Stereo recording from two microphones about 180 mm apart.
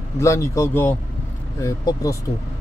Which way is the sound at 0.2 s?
15° left (ahead or behind).